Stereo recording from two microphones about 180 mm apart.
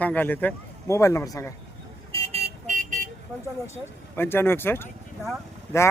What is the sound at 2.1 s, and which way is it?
Vehicle, 35° right (ahead or behind).